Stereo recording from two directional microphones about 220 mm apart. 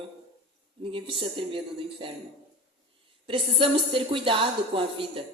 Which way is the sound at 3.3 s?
25° right (ahead or behind).